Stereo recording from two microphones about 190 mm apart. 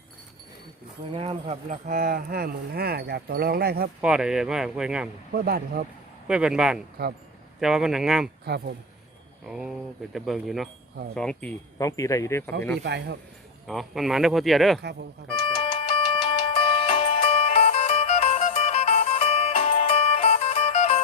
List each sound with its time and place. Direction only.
1.1 s speech: 30° right (ahead or behind); by 3.8 s 55° right (ahead or behind)
4.0 s speech: 5° right (ahead or behind)
5.3 s speech: 55° right (ahead or behind)
6.2 s speech: 5° right (ahead or behind)
8.4 s speech: 55° right (ahead or behind)
9.5 s speech: centre (ahead or behind)
11.8 s speech: 15° left (ahead or behind)
12.8 s speech: 65° right (ahead or behind)
13.7 s speech: centre (ahead or behind)
15.3 s music: 25° left (ahead or behind)